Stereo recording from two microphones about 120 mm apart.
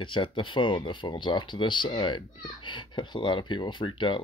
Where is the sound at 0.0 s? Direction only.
45° left (ahead or behind).